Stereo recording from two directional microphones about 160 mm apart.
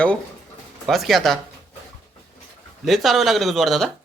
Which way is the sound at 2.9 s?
Centre (ahead or behind).